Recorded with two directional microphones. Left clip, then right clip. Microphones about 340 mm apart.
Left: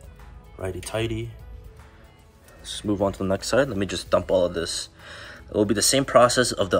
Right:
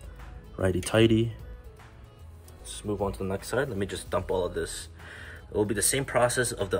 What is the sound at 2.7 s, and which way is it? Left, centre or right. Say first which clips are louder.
Speech: left 6 dB; left.